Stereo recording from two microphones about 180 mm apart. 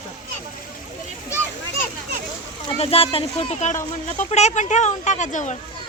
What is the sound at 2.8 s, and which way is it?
Speech, 30° left (ahead or behind).